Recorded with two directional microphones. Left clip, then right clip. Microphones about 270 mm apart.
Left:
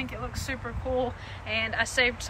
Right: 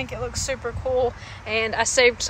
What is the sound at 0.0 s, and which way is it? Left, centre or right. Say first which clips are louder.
A woman's voice: right 7 dB; centre.